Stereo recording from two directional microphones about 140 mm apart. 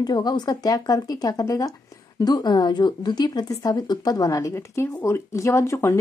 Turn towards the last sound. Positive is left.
turn(degrees=20)  # may be behind; listen again after turning